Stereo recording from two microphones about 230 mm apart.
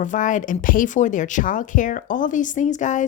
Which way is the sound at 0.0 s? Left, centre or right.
Left.